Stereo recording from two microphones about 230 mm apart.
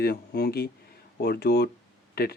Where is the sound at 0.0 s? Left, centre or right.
Left.